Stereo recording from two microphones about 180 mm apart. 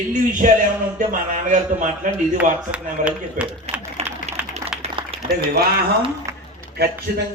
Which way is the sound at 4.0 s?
35° right (ahead or behind).